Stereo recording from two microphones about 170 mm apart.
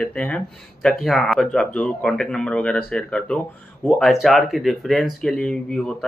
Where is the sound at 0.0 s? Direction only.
5° left (ahead or behind).